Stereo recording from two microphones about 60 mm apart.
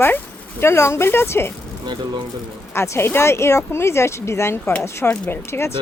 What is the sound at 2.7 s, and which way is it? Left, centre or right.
Speech, left.